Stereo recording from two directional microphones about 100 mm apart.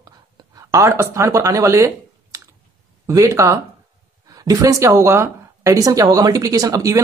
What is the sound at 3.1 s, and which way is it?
Speech, 35° right (ahead or behind).